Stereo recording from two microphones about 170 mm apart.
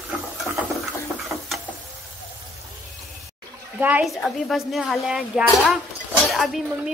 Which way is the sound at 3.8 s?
5° right (ahead or behind).